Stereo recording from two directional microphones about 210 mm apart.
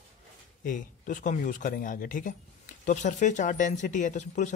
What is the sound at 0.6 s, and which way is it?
Speech, 40° left (ahead or behind).